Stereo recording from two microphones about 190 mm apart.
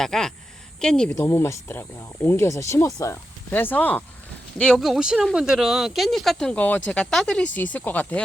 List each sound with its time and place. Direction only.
0.0 s speech: centre (ahead or behind)